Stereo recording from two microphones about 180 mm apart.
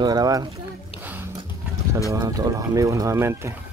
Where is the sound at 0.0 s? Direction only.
20° right (ahead or behind).